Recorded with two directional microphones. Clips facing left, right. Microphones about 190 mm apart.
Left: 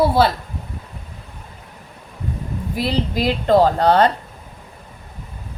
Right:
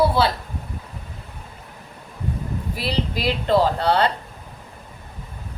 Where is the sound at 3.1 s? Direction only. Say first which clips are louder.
Left 4 dB; 45° left (ahead or behind).